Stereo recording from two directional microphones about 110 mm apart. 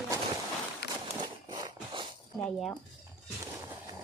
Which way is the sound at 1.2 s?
45° right (ahead or behind).